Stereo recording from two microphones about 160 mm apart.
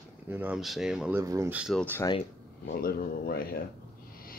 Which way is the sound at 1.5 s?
5° right (ahead or behind).